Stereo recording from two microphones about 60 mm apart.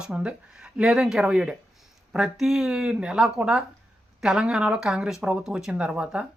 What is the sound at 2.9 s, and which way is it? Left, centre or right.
Speech, centre.